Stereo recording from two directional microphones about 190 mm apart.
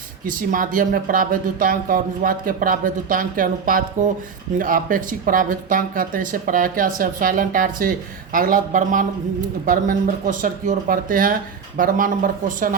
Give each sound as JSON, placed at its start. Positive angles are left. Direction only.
{"t": 0.3, "sound": "speech", "side_deg": -45}